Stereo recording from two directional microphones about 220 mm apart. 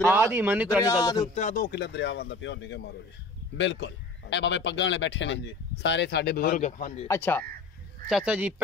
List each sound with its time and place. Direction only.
0.1 s speech: 10° right (ahead or behind)
1.3 s a man's voice: 35° left (ahead or behind)
7.1 s speech: 10° left (ahead or behind)
8.1 s speech: 5° right (ahead or behind)